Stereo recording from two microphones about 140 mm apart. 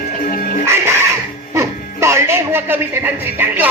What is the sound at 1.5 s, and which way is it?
Speech, 20° right (ahead or behind).